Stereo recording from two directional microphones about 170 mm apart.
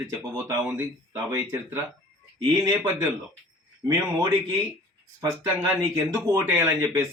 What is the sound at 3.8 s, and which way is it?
Speech, 20° right (ahead or behind).